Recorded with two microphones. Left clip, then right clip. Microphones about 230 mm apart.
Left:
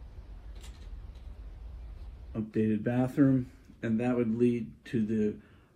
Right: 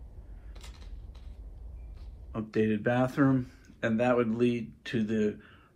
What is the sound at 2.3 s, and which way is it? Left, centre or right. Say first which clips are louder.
Speech: right 2 dB; centre.